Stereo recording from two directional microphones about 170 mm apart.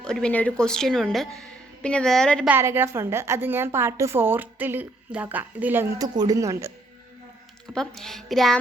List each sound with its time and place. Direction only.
0.0 s a woman's voice: 5° left (ahead or behind)
2.5 s a woman's voice: 15° right (ahead or behind)
7.7 s a woman's voice: 5° left (ahead or behind)